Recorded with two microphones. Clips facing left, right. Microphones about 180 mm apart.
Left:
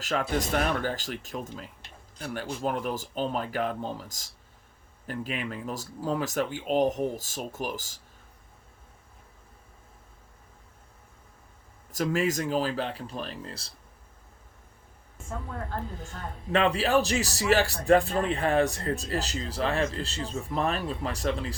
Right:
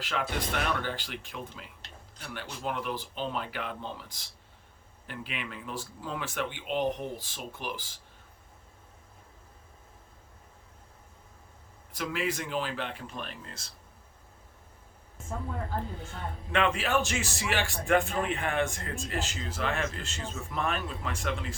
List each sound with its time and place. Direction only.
0.0 s a man's voice: 40° left (ahead or behind)
11.9 s a man's voice: 45° left (ahead or behind)
16.0 s a man's voice: 40° left (ahead or behind)